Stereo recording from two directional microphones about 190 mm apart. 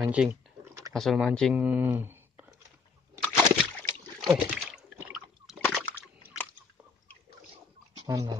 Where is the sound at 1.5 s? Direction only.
10° right (ahead or behind).